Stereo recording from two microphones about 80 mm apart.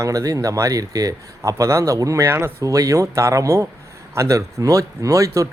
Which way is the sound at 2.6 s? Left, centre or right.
Right.